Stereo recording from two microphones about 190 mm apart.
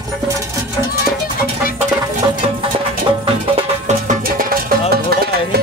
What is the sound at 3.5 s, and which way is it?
Music, 40° right (ahead or behind).